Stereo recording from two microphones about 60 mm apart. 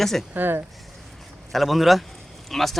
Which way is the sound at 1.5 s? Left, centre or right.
Centre.